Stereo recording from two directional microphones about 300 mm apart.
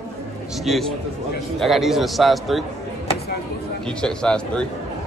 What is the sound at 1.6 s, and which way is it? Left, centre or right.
Speech, centre.